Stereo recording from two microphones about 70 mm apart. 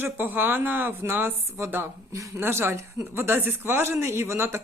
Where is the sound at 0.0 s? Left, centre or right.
Right.